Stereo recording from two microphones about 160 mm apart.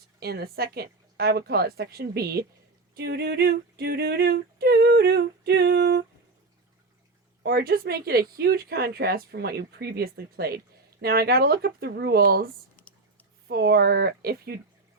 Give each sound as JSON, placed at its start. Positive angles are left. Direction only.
{"t": 0.2, "sound": "speech", "side_deg": -85}
{"t": 2.9, "sound": "yodeling", "side_deg": -80}
{"t": 7.4, "sound": "speech", "side_deg": -70}
{"t": 13.5, "sound": "yodeling", "side_deg": -80}